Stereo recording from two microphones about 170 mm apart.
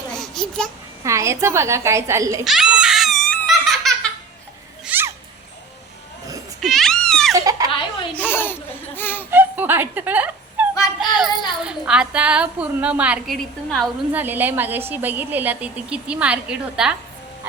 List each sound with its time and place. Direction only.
0.2 s babbling: 5° left (ahead or behind)
1.0 s a woman's voice: 15° right (ahead or behind)
2.4 s giggle: centre (ahead or behind)
4.9 s a sound: 10° right (ahead or behind)
6.6 s a sound: centre (ahead or behind)
7.3 s baby laughter: 20° right (ahead or behind)
7.7 s baby laughter: 30° left (ahead or behind)
8.1 s baby laughter: 10° left (ahead or behind)
9.0 s a sound: 10° left (ahead or behind)
9.3 s a sound: 10° right (ahead or behind)
11.0 s child singing: 5° right (ahead or behind)
11.6 s a woman's voice: 5° right (ahead or behind)
14.1 s a woman's voice: 10° right (ahead or behind)